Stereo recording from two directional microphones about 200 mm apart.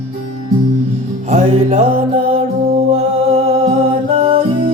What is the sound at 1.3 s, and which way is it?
Music, 30° right (ahead or behind).